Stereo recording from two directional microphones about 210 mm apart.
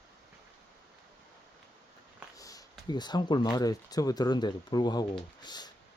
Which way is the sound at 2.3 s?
15° left (ahead or behind).